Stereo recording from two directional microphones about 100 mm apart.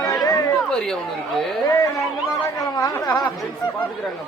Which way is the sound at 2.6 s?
40° left (ahead or behind).